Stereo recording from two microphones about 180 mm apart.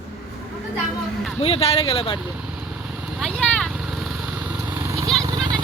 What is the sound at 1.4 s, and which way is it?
Speech, 35° left (ahead or behind).